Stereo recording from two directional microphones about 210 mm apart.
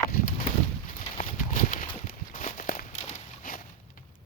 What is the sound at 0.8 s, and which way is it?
Horse, 40° left (ahead or behind).